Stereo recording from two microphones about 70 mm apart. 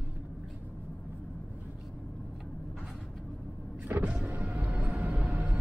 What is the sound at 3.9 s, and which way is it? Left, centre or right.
Vehicle, right.